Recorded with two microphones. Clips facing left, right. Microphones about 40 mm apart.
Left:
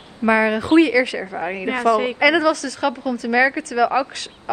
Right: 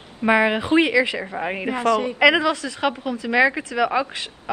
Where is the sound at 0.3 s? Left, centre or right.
Right.